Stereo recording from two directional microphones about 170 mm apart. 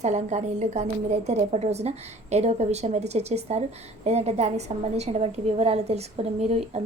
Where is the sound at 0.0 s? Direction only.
40° right (ahead or behind).